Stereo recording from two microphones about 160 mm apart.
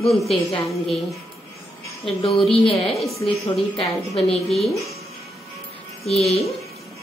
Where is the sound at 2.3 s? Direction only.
35° left (ahead or behind).